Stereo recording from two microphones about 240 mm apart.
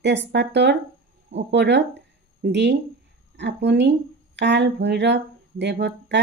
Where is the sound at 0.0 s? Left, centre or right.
Right.